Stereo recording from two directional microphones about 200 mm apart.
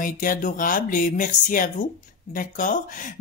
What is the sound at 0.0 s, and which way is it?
A woman's voice, 45° left (ahead or behind).